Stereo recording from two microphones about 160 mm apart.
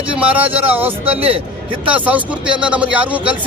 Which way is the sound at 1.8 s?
10° right (ahead or behind).